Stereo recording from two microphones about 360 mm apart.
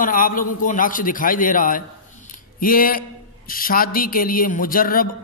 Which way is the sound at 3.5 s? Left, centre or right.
Left.